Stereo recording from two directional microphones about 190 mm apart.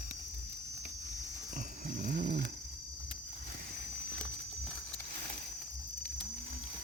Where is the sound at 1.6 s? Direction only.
45° right (ahead or behind).